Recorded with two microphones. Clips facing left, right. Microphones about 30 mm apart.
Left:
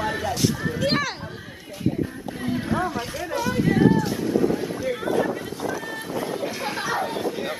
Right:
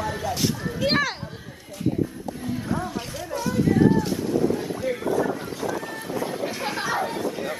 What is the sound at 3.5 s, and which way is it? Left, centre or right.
Speech, left.